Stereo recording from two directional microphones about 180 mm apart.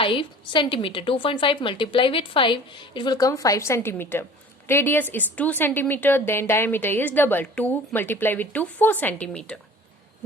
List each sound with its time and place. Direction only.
0.0 s a woman's voice: 30° left (ahead or behind); by 9.6 s 5° left (ahead or behind)